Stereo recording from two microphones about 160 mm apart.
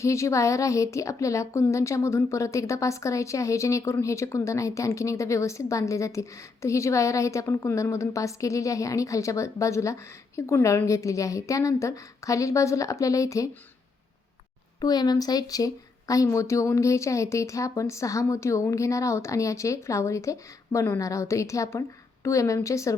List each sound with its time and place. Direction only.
0.0 s a woman's voice: 20° left (ahead or behind)
14.8 s a woman's voice: 25° left (ahead or behind)